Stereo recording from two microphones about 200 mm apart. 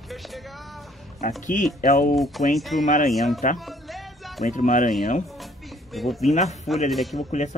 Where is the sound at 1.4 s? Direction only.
40° left (ahead or behind).